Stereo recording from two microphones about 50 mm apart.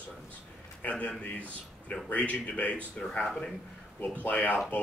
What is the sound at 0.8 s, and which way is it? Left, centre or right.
A man's voice, left.